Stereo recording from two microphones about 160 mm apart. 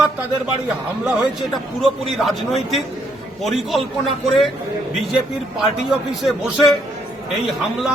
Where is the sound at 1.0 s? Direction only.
Centre (ahead or behind).